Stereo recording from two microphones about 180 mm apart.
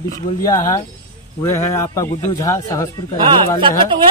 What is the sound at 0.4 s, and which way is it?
Speech, 20° left (ahead or behind).